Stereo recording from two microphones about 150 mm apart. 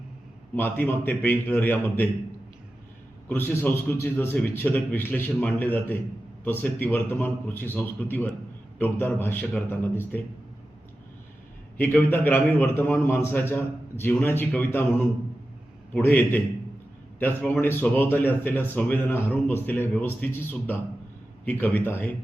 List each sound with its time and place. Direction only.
0.5 s a man's voice: 15° left (ahead or behind)
3.2 s a man's voice: 15° left (ahead or behind)
11.8 s a man's voice: 15° left (ahead or behind)
17.5 s a man's voice: 15° left (ahead or behind)